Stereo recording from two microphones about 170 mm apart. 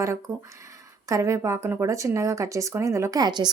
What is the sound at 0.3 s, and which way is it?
A woman's voice, 20° right (ahead or behind).